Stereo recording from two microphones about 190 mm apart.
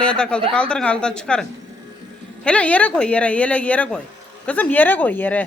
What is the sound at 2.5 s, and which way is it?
Speech, 5° left (ahead or behind).